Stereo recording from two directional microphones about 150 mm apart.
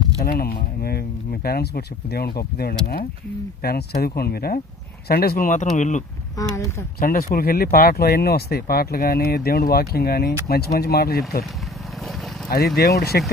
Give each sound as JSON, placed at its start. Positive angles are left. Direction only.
{"t": 0.3, "sound": "speech", "side_deg": 85}
{"t": 6.4, "sound": "a woman's voice", "side_deg": 20}
{"t": 7.0, "sound": "speech", "side_deg": 70}
{"t": 12.0, "sound": "vehicle", "side_deg": 0}
{"t": 12.7, "sound": "speech", "side_deg": 90}